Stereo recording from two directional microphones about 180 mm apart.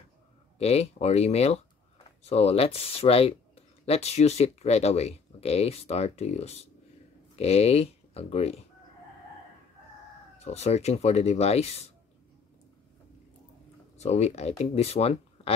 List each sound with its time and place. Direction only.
0.6 s speech: 35° left (ahead or behind)
10.4 s speech: 35° left (ahead or behind)
13.9 s speech: 40° left (ahead or behind)